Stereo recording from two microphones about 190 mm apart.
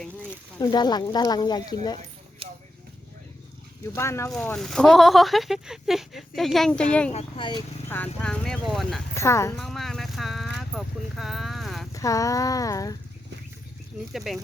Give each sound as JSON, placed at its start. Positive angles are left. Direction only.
{"t": 0.6, "sound": "speech", "side_deg": 20}
{"t": 3.9, "sound": "speech", "side_deg": 15}
{"t": 7.1, "sound": "speech", "side_deg": 30}
{"t": 7.9, "sound": "speech", "side_deg": 10}
{"t": 9.1, "sound": "speech", "side_deg": 15}
{"t": 9.6, "sound": "speech", "side_deg": 0}
{"t": 11.9, "sound": "speech", "side_deg": 15}
{"t": 14.1, "sound": "speech", "side_deg": 0}